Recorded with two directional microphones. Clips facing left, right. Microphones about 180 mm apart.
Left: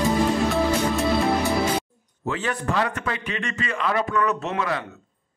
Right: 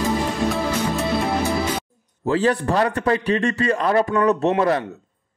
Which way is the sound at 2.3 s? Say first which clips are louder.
Right 7 dB; 35° right (ahead or behind).